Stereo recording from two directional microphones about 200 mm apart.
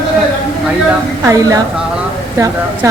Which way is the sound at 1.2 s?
15° right (ahead or behind).